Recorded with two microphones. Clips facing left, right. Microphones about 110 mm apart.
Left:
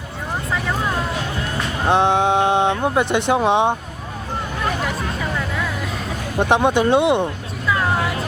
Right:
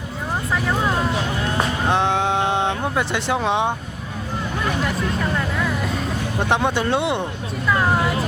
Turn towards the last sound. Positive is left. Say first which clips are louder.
# left 5 dB
turn(degrees=15)  # may be behind; listen again after turning